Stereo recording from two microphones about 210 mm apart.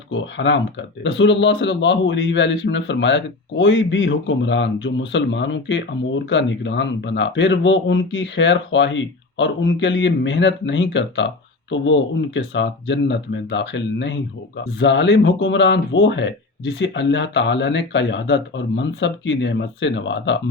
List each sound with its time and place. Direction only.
0.1 s speech: 60° left (ahead or behind)